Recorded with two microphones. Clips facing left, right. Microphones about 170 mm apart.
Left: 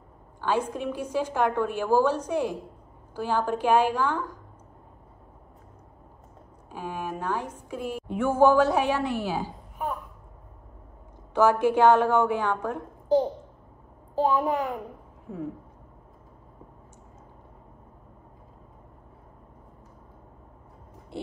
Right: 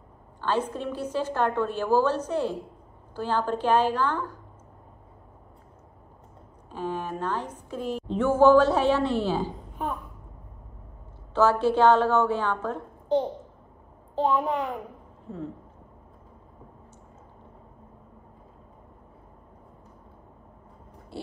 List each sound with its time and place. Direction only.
0.4 s a woman's voice: 10° left (ahead or behind)
6.7 s a woman's voice: 10° left (ahead or behind)
11.3 s a woman's voice: 15° left (ahead or behind)
21.1 s a sound: 20° left (ahead or behind)